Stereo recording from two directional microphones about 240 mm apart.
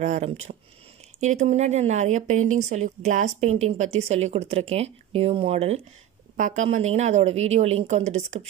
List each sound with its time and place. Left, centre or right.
0.0 s speech: right